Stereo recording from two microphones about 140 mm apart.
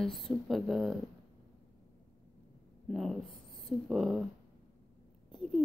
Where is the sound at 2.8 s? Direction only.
Centre (ahead or behind).